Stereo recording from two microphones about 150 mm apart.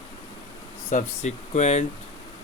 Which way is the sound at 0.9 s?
50° left (ahead or behind).